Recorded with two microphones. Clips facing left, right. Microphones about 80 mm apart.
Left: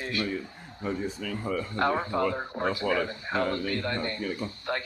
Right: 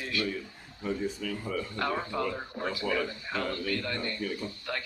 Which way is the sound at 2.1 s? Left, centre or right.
Left.